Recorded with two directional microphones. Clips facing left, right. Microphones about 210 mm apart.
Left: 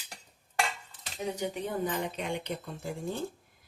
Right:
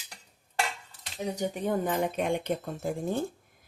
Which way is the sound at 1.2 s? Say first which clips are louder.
Right 3 dB; 45° right (ahead or behind).